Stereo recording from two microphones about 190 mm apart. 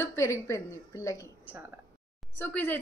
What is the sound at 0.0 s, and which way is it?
A woman's voice, 15° left (ahead or behind).